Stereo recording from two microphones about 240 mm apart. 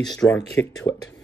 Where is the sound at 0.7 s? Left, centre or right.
Centre.